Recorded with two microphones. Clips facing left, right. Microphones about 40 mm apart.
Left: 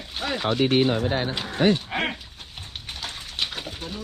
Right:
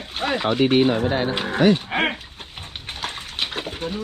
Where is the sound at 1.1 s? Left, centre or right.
Right.